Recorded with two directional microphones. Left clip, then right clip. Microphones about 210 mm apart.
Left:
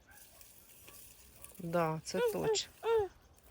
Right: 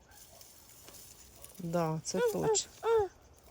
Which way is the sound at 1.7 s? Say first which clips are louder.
Even; 5° right (ahead or behind).